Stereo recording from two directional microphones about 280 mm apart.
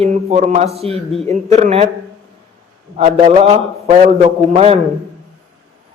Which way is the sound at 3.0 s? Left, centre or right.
Right.